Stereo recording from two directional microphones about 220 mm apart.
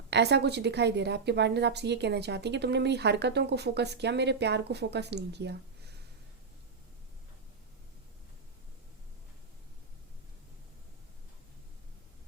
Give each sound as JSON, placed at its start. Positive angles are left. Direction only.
{"t": 0.1, "sound": "a woman's voice", "side_deg": -50}